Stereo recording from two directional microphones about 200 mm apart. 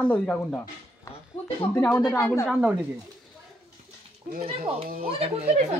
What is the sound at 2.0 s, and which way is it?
Speech, 5° left (ahead or behind).